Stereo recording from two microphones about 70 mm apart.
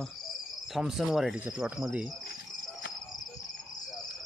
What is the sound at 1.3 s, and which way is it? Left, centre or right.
Speech, right.